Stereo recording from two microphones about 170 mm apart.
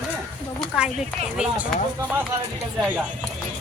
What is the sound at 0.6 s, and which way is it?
A woman's voice, 5° right (ahead or behind).